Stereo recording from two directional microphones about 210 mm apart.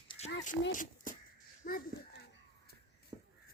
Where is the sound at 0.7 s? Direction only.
40° left (ahead or behind).